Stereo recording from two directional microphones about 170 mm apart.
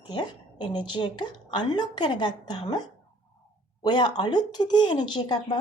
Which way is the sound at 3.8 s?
25° left (ahead or behind).